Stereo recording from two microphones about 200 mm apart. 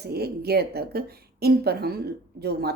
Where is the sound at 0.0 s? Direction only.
50° right (ahead or behind).